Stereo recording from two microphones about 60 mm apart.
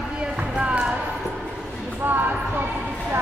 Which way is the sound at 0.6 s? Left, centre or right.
Centre.